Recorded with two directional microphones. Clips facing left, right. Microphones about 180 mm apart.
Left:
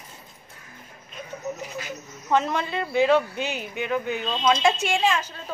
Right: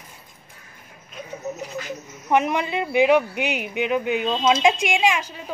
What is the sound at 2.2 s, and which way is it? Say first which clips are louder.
A woman's voice: right 3 dB; 15° right (ahead or behind).